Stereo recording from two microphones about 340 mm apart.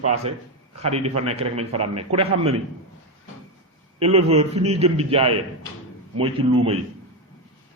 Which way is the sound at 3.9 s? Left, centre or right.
Centre.